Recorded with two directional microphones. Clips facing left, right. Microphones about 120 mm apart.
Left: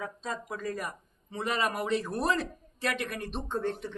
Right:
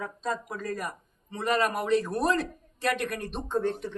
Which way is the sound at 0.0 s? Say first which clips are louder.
Right 4 dB; centre (ahead or behind).